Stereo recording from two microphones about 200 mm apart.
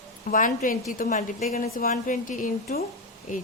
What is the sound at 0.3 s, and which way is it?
A woman's voice, 40° left (ahead or behind).